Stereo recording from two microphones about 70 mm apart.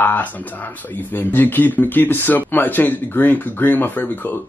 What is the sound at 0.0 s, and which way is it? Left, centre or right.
Speech, left.